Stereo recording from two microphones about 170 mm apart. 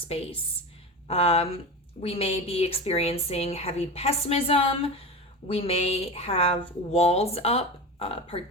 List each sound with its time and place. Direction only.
0.1 s speech: 35° left (ahead or behind)